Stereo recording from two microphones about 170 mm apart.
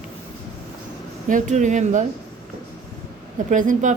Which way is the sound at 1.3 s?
45° right (ahead or behind).